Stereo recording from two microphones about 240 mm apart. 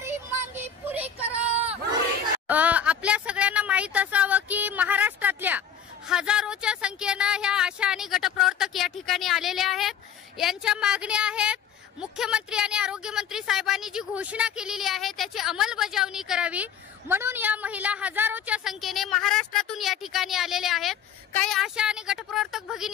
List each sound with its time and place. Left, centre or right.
0.0 s music: centre
0.8 s child singing: centre
2.4 s a sound: centre
6.0 s a woman's voice: centre